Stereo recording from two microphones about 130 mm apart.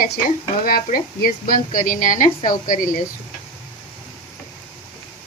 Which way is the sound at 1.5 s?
90° left.